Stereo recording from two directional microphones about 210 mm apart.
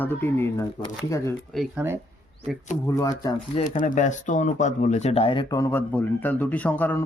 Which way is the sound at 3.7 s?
35° left (ahead or behind).